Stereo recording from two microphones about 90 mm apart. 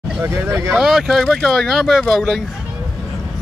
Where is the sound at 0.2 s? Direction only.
25° right (ahead or behind).